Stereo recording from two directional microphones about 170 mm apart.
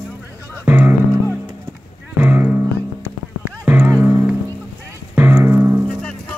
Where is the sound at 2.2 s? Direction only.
10° right (ahead or behind).